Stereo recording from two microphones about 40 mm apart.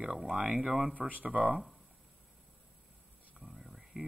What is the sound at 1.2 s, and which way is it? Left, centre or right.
Speech, right.